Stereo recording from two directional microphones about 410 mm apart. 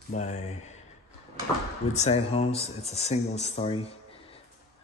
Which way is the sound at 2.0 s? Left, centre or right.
Centre.